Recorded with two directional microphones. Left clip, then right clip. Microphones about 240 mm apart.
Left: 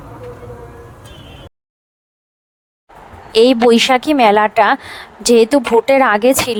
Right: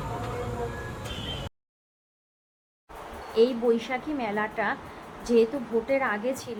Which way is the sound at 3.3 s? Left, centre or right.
Left.